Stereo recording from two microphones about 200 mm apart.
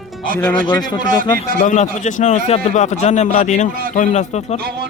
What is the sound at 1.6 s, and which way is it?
A man's voice, 35° left (ahead or behind).